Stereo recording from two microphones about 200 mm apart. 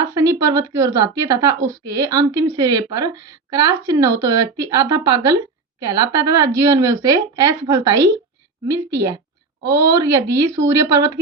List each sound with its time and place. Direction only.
0.2 s a woman's voice: 15° right (ahead or behind)